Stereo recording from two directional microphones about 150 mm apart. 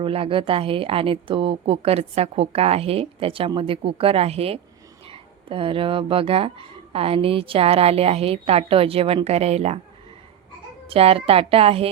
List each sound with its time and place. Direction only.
0.0 s speech: 40° right (ahead or behind)
10.8 s speech: 40° right (ahead or behind)